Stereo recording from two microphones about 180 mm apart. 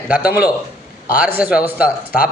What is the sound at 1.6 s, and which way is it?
Speech, 55° left (ahead or behind).